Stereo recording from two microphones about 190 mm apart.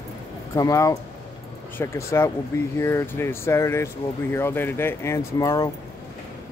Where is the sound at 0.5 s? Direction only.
15° left (ahead or behind).